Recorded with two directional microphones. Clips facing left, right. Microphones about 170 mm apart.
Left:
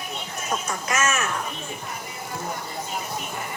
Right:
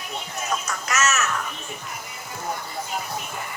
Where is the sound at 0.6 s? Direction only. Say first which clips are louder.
Left 1 dB; 30° left (ahead or behind).